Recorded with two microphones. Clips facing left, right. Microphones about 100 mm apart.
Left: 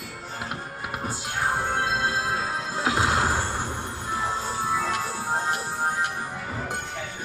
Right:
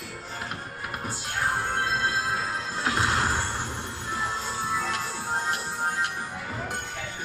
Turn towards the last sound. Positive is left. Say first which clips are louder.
# left 2 dB
turn(degrees=15)  # may be behind; listen again after turning